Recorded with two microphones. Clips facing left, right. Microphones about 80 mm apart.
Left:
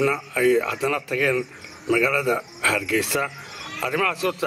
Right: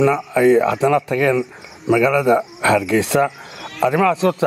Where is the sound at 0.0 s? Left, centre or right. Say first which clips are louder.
Right 6 dB; centre.